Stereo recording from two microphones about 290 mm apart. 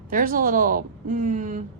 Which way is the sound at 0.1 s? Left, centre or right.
Right.